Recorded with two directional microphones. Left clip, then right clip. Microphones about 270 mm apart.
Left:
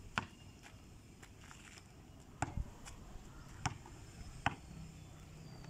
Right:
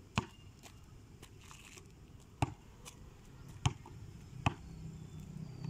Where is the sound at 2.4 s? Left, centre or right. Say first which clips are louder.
Right 3 dB; centre.